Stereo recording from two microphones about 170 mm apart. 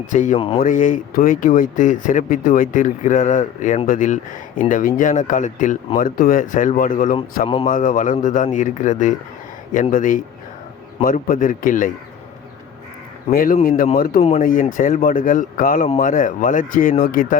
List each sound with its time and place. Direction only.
0.1 s speech: 50° left (ahead or behind)
0.3 s speech: 35° left (ahead or behind)
0.6 s speech: 50° left (ahead or behind)
7.4 s speech: 30° left (ahead or behind)
7.7 s speech: 50° left (ahead or behind)
13.3 s speech: 55° left (ahead or behind)
14.2 s speech: 35° left (ahead or behind)
14.4 s speech: 55° left (ahead or behind)